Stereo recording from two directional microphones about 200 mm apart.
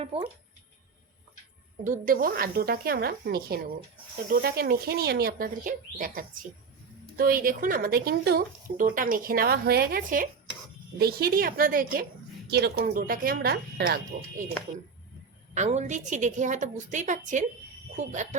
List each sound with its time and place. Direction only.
0.1 s speech: 25° right (ahead or behind)
1.8 s a woman's voice: 45° right (ahead or behind)
15.5 s a woman's voice: 35° right (ahead or behind)